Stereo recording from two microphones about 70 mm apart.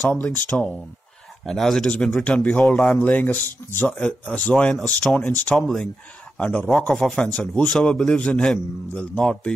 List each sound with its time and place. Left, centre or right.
0.1 s a man's voice: centre
2.2 s speech: centre
2.6 s a man's voice: centre
3.0 s speech: left
3.8 s a man's voice: centre
7.7 s a man's voice: centre